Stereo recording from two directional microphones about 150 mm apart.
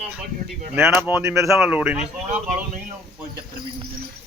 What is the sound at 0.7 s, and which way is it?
Speech, 15° right (ahead or behind).